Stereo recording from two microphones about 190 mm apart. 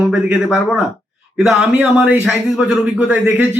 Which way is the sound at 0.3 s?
5° right (ahead or behind).